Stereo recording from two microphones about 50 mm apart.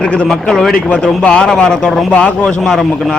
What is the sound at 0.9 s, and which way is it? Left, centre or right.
Speech, left.